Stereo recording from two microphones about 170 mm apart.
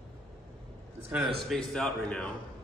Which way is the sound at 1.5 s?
5° left (ahead or behind).